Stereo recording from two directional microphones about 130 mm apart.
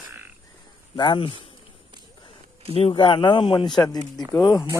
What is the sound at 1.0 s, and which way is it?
Speech, 40° left (ahead or behind).